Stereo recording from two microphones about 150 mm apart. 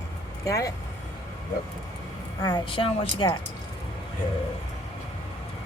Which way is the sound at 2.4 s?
30° left (ahead or behind).